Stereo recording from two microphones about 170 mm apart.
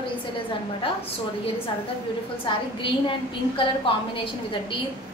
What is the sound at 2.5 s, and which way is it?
Speech, 30° left (ahead or behind).